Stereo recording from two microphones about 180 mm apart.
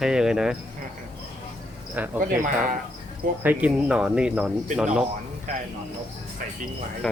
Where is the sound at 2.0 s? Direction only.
10° right (ahead or behind).